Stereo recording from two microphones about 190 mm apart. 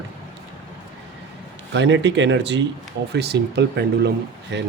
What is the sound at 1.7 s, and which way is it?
Speech, 70° right (ahead or behind).